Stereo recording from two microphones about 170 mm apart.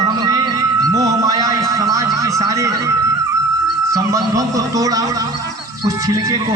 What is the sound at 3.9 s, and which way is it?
A man's voice, 20° right (ahead or behind).